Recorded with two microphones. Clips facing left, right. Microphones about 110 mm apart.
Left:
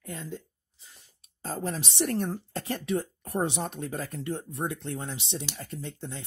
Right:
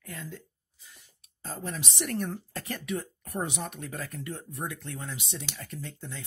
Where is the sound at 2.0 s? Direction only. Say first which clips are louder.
Left 4 dB; 30° left (ahead or behind).